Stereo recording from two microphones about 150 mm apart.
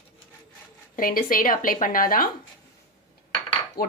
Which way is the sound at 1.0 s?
70° left (ahead or behind).